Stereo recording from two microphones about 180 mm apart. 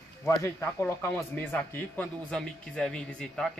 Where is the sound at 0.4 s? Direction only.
15° left (ahead or behind).